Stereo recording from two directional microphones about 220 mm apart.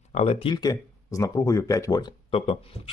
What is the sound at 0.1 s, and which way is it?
Speech, 30° left (ahead or behind).